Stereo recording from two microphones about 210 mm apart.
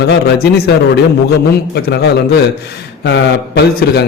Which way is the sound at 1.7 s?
50° left (ahead or behind).